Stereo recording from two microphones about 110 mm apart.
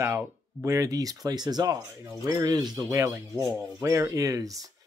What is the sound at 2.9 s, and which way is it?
Speech, 30° right (ahead or behind).